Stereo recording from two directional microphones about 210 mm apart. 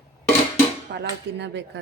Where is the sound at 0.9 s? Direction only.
55° right (ahead or behind).